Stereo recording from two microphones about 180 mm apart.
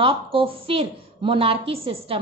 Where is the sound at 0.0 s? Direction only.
30° right (ahead or behind).